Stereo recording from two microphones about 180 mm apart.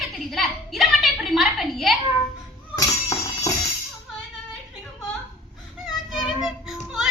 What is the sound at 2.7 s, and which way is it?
Music, 20° left (ahead or behind).